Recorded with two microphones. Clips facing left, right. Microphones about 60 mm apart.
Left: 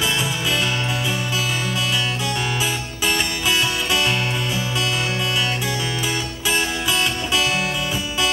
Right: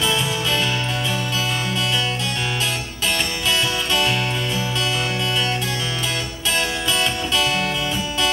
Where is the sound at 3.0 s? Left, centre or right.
Centre.